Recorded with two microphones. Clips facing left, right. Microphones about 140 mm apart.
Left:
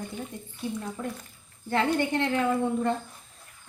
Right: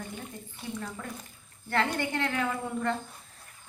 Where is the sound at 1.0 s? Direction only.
20° left (ahead or behind).